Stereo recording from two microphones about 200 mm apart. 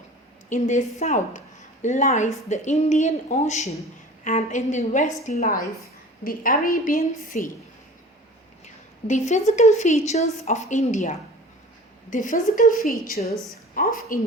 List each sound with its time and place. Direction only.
0.5 s a woman's voice: 35° left (ahead or behind)
8.6 s a sound: 35° left (ahead or behind)
9.5 s a woman's voice: 35° left (ahead or behind)